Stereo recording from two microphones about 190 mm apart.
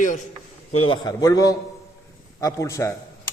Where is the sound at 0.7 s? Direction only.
25° left (ahead or behind).